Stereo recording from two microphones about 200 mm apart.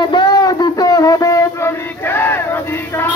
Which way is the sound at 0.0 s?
20° left (ahead or behind).